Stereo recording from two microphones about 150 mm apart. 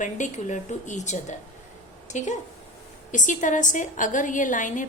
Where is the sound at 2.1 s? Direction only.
55° left (ahead or behind).